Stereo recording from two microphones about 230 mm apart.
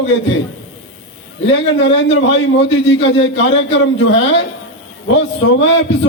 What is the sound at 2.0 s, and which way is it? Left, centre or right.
A man's voice, left.